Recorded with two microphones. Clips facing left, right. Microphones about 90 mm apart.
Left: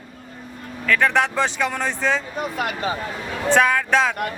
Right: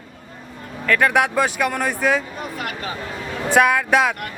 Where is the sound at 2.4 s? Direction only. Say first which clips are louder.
Left 4 dB; 20° left (ahead or behind).